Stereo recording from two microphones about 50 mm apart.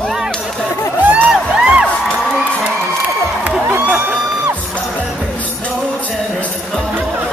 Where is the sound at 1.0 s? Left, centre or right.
Right.